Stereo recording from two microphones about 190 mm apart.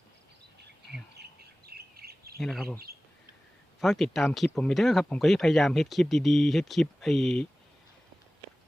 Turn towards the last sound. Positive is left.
turn(degrees=0)  # may be behind; listen again after turning